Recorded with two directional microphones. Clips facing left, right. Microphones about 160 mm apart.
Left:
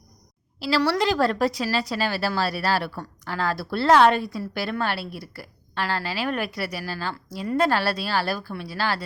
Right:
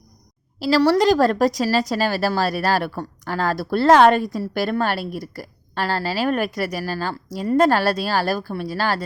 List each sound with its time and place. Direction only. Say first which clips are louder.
0.6 s speech: right 6 dB; 40° right (ahead or behind)